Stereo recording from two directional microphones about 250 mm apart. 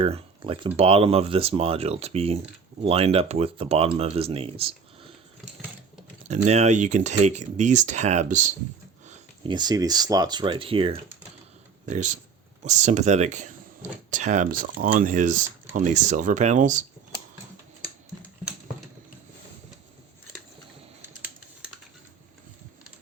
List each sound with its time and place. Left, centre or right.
0.0 s speech: right
6.2 s speech: right